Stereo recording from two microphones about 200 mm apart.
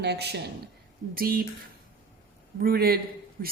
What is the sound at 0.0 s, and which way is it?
Speech, 55° right (ahead or behind).